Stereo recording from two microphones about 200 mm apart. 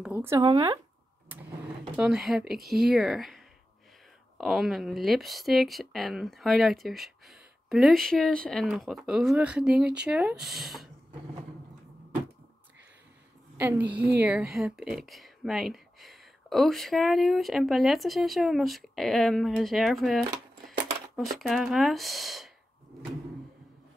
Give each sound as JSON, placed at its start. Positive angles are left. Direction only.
{"t": 0.0, "sound": "speech", "side_deg": -10}
{"t": 2.0, "sound": "speech", "side_deg": 0}
{"t": 13.6, "sound": "speech", "side_deg": -10}
{"t": 13.9, "sound": "speech", "side_deg": -55}
{"t": 14.2, "sound": "speech", "side_deg": -5}